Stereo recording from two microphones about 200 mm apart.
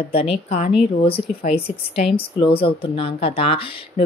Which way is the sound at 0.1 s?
30° left (ahead or behind).